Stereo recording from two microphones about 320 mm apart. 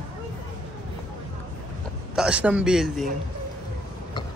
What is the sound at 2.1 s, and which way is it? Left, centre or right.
Speech, centre.